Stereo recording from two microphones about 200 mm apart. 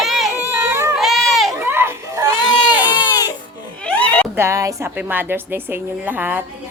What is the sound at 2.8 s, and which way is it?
Baby cry, 20° left (ahead or behind).